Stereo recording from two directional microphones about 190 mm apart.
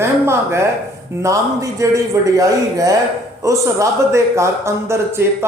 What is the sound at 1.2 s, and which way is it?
A man's voice, 15° right (ahead or behind).